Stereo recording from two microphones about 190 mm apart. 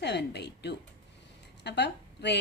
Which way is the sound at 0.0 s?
60° left (ahead or behind).